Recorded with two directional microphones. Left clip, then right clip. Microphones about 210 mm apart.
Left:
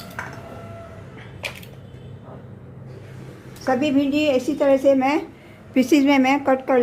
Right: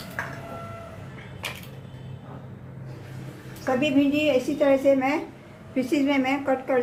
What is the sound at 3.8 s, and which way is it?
A woman's voice, 40° left (ahead or behind).